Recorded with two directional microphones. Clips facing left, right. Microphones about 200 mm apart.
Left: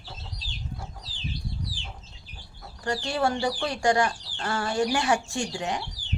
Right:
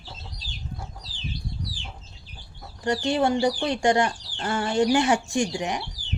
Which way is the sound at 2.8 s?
20° right (ahead or behind).